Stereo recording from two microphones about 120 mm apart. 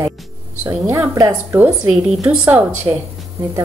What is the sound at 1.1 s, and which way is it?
Speech, 25° right (ahead or behind).